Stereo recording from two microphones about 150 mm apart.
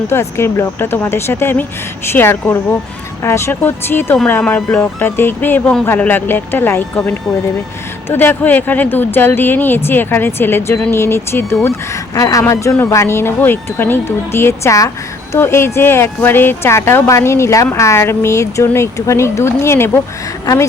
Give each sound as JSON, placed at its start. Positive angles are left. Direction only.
{"t": 0.1, "sound": "speech", "side_deg": 15}
{"t": 8.1, "sound": "speech", "side_deg": 15}